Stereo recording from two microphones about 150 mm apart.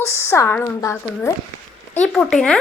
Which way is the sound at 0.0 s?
15° left (ahead or behind).